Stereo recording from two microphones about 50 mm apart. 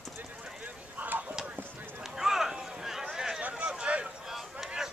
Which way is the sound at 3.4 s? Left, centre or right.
Right.